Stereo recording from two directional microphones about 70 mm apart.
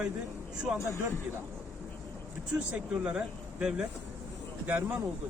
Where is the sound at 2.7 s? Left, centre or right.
Centre.